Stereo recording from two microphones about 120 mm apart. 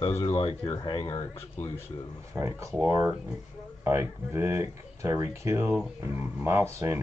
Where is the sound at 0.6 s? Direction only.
35° left (ahead or behind).